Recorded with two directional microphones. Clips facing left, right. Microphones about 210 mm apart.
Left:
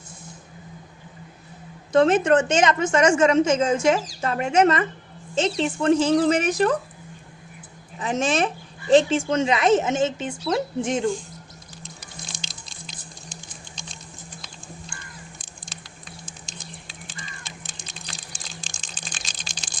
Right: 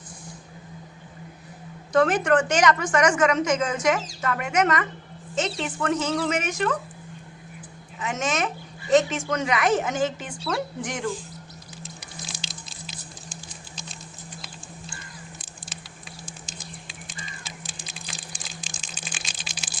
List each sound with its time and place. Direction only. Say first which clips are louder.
1.9 s a woman's voice: left 3 dB; 25° left (ahead or behind)
7.9 s a woman's voice: left 4 dB; 30° left (ahead or behind)
11.8 s music: right 1 dB; centre (ahead or behind)
17.8 s a sound: even; 5° right (ahead or behind)